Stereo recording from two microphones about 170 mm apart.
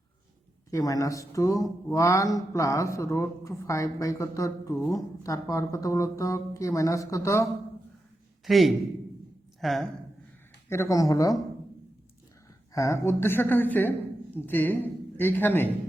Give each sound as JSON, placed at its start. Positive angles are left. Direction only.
{"t": 0.7, "sound": "speech", "side_deg": 20}
{"t": 8.4, "sound": "a man's voice", "side_deg": 0}
{"t": 10.7, "sound": "speech", "side_deg": 15}
{"t": 12.7, "sound": "speech", "side_deg": 20}